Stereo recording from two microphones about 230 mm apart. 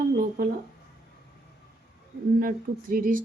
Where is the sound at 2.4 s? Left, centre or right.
Right.